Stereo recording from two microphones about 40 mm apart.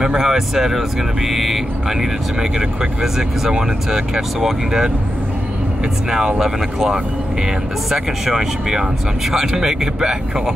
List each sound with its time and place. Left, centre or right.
0.0 s speech: centre
6.0 s speech: centre